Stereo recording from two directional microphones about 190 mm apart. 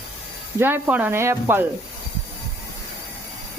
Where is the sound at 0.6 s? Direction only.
10° right (ahead or behind).